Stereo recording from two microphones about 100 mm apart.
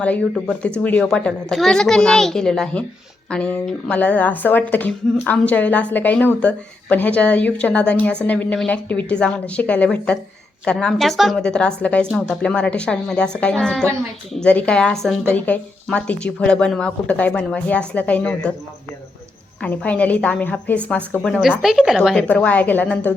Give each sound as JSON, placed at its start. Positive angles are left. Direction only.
{"t": 0.3, "sound": "a child's voice", "side_deg": 10}
{"t": 15.3, "sound": "speech", "side_deg": 15}
{"t": 19.6, "sound": "speech", "side_deg": 15}
{"t": 21.6, "sound": "a child's voice", "side_deg": -5}